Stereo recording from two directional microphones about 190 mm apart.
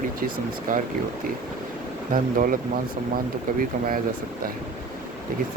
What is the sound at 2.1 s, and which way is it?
Speech, 45° right (ahead or behind).